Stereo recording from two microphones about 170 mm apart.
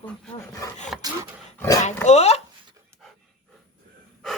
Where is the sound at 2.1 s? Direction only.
40° left (ahead or behind).